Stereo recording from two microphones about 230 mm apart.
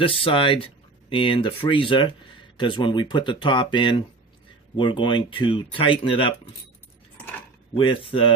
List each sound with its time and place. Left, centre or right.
0.0 s speech: left
7.8 s speech: left